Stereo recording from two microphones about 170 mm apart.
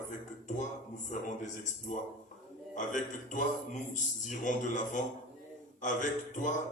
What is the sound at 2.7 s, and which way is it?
Speech, 50° left (ahead or behind).